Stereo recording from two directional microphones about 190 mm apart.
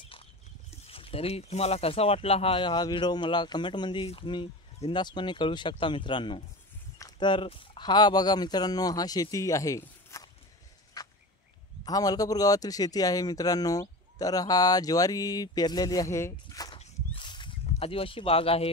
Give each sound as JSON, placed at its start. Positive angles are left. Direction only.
{"t": 0.7, "sound": "speech", "side_deg": 30}
{"t": 11.0, "sound": "a sound", "side_deg": 20}
{"t": 11.8, "sound": "speech", "side_deg": 20}